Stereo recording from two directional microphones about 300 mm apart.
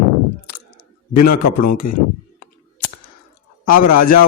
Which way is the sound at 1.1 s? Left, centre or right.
Left.